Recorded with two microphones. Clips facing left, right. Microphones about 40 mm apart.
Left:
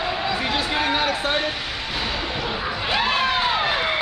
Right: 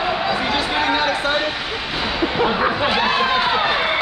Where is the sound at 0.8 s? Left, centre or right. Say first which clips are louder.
Right 3 dB; centre.